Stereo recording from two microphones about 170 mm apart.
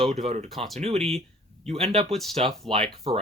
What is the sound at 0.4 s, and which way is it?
Speech, centre (ahead or behind).